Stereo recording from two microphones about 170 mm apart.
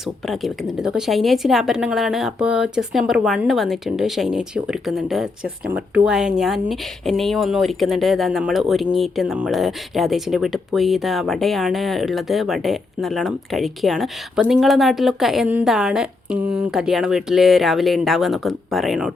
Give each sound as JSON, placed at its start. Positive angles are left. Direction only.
{"t": 0.0, "sound": "speech", "side_deg": 0}